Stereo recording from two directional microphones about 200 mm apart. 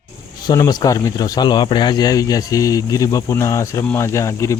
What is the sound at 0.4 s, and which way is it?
Speech, 20° left (ahead or behind).